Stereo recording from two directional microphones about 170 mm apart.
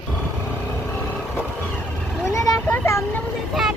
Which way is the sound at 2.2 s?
20° left (ahead or behind).